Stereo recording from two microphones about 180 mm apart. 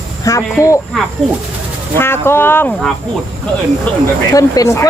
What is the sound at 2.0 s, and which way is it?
Speech, 15° left (ahead or behind).